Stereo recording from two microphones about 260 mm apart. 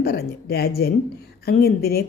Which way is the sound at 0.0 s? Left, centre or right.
Left.